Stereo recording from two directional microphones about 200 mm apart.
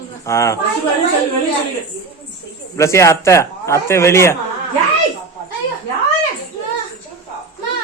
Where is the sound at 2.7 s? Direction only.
15° left (ahead or behind).